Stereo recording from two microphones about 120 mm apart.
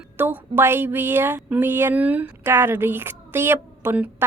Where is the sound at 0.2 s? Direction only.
15° right (ahead or behind).